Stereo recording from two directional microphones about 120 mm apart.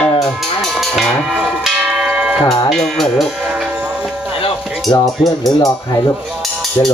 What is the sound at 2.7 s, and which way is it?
Speech, centre (ahead or behind).